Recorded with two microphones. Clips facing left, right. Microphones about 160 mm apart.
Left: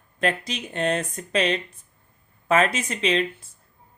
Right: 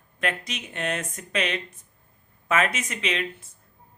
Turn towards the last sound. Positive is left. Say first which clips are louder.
# left 6 dB
turn(degrees=30)  # may be behind; listen again after turning